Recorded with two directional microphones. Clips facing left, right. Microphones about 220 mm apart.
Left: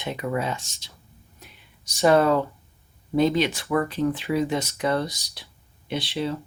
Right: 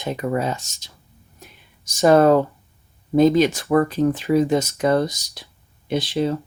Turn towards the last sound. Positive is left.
turn(degrees=-45)  # may be behind; listen again after turning